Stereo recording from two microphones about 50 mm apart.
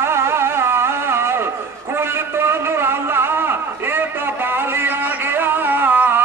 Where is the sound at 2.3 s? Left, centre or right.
Right.